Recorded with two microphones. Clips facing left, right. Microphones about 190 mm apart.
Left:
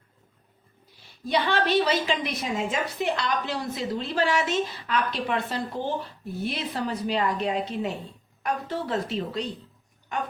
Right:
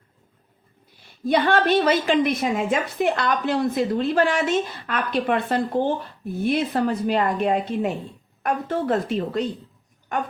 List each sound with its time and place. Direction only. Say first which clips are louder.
1.2 s a woman's voice: right 5 dB; 50° right (ahead or behind)